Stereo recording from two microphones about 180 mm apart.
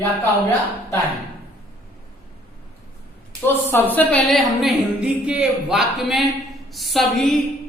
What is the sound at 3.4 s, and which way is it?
A woman's voice, 10° left (ahead or behind).